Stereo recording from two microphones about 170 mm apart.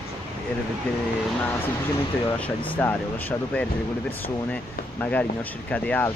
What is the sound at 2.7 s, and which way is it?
Speech, 10° left (ahead or behind).